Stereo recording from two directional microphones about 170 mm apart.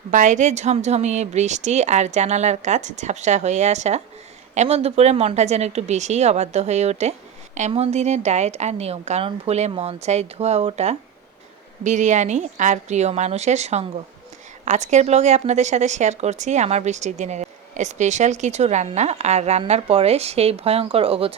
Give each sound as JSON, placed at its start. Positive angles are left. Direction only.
{"t": 0.1, "sound": "a woman's voice", "side_deg": -45}